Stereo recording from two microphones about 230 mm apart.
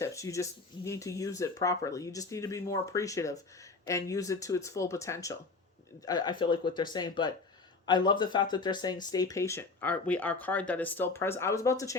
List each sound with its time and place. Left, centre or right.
0.0 s speech: centre